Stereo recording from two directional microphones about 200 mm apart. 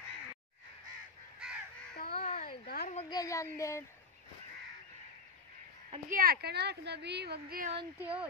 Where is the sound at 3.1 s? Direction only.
15° left (ahead or behind).